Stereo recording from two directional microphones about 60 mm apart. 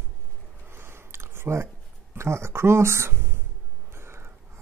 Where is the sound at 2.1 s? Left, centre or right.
Right.